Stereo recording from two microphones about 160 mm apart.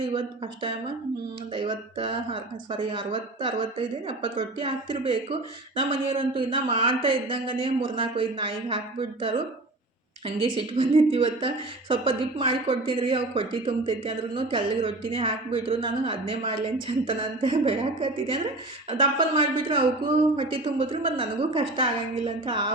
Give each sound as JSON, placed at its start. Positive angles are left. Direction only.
{"t": 0.0, "sound": "speech", "side_deg": -35}